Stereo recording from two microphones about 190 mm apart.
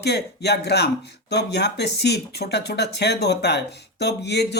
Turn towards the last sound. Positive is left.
turn(degrees=60)  # may be behind; listen again after turning